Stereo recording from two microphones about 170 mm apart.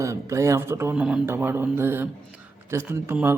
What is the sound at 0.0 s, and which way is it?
Speech, 15° right (ahead or behind).